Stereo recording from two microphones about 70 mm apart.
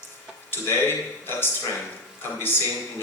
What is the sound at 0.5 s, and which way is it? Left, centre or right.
Speech, left.